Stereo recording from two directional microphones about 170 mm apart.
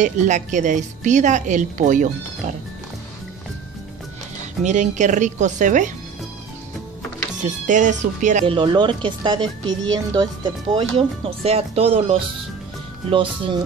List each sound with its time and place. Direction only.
0.0 s a woman's voice: 45° right (ahead or behind)
4.6 s a woman's voice: 45° right (ahead or behind)
7.4 s a woman's voice: 45° right (ahead or behind)
8.5 s a woman's voice: 30° right (ahead or behind)